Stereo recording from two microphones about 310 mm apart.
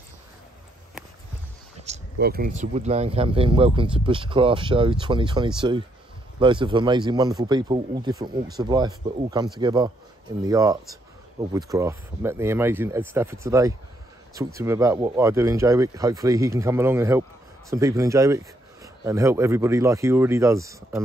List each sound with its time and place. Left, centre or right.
1.8 s speech: right; by 21.0 s centre